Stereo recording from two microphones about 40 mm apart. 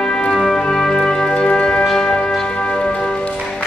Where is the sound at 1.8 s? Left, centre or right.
Centre.